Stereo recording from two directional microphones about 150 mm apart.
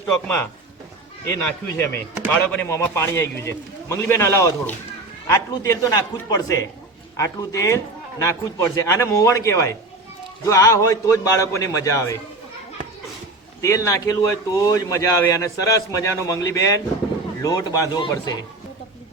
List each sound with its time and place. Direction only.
1.3 s a man's voice: 15° left (ahead or behind)
13.6 s speech: 20° left (ahead or behind)